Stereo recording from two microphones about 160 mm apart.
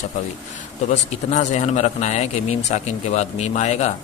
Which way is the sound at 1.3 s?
45° left (ahead or behind).